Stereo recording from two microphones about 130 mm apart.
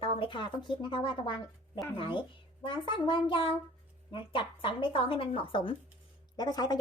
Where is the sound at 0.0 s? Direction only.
40° left (ahead or behind).